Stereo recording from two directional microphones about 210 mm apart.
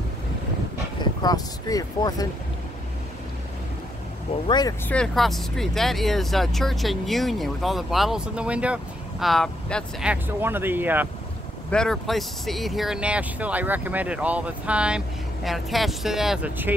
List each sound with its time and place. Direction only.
1.2 s speech: 15° left (ahead or behind)
4.5 s speech: 20° left (ahead or behind)
4.8 s speech: 5° left (ahead or behind)
11.7 s speech: 5° left (ahead or behind)